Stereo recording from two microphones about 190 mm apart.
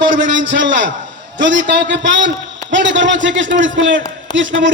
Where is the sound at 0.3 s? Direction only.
70° right (ahead or behind).